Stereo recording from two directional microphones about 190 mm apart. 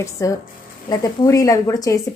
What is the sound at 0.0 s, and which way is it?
A woman's voice, 15° left (ahead or behind).